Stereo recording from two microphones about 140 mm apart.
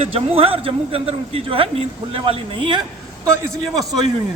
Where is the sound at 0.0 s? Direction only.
40° right (ahead or behind).